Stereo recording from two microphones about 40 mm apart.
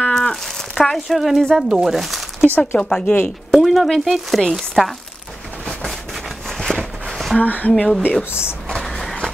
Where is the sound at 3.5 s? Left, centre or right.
Centre.